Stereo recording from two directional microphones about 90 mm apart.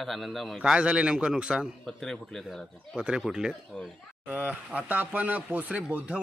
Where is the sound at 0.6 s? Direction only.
10° right (ahead or behind).